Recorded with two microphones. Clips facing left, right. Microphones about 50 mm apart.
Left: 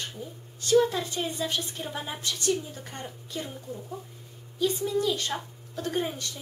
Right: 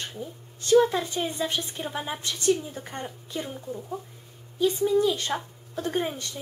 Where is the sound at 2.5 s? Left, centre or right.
Centre.